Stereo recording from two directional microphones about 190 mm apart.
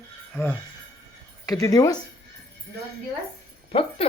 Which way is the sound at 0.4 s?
10° left (ahead or behind).